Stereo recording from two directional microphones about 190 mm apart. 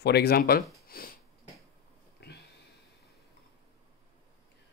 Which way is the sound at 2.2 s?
60° left (ahead or behind).